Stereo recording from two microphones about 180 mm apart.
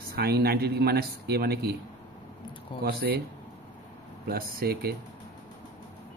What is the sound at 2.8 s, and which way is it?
Speech, 60° right (ahead or behind).